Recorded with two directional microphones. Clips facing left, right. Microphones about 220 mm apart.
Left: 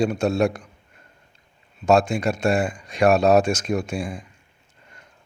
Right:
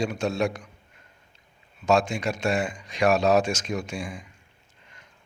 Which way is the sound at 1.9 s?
55° left (ahead or behind).